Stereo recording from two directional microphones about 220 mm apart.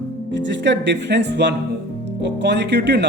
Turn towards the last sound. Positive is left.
turn(degrees=-50)  # may be behind; listen again after turning